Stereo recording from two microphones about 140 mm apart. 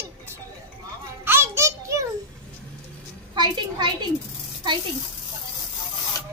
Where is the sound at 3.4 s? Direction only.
35° right (ahead or behind).